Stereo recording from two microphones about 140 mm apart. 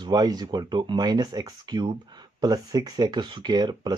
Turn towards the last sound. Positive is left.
turn(degrees=-30)  # may be behind; listen again after turning